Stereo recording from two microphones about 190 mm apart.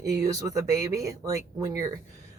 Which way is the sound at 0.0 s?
20° right (ahead or behind).